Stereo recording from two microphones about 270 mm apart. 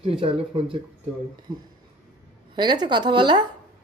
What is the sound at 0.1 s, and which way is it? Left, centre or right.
Speech, right.